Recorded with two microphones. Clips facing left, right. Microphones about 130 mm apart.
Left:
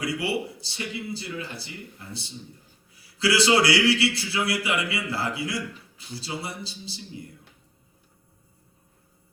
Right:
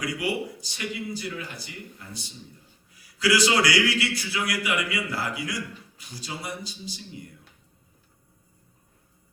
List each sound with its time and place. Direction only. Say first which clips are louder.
0.0 s a man's voice: left 1 dB; 30° left (ahead or behind)
3.2 s a man's voice: left 1 dB; 30° left (ahead or behind)